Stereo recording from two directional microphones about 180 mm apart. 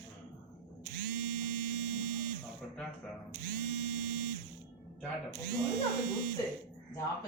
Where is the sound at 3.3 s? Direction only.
60° right (ahead or behind).